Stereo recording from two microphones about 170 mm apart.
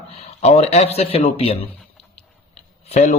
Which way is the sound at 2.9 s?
45° left (ahead or behind).